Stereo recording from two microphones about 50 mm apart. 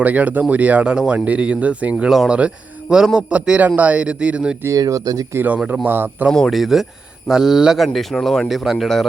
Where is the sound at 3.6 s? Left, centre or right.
Right.